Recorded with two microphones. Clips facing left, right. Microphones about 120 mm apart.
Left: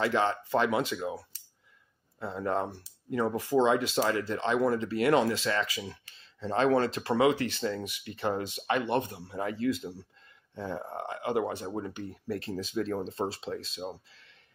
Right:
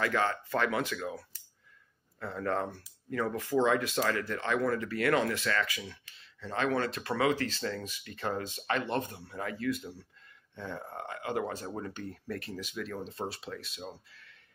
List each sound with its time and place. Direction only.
0.0 s speech: 20° left (ahead or behind)